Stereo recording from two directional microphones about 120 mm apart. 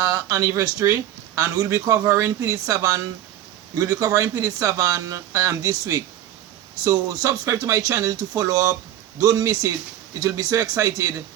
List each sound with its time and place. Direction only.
0.0 s speech: 25° right (ahead or behind)